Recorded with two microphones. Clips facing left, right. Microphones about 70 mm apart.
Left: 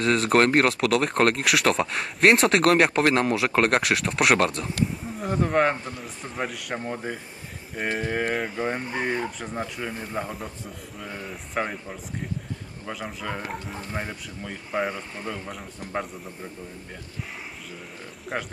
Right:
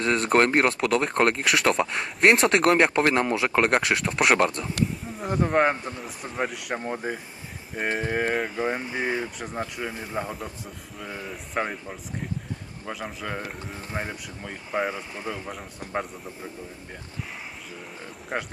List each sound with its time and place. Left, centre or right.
0.0 s speech: centre
18.3 s speech: centre